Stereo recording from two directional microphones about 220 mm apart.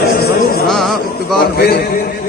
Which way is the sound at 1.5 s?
45° left (ahead or behind).